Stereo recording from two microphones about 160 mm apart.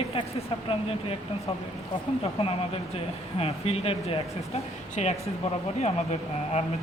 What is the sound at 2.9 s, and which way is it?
Speech, 40° left (ahead or behind).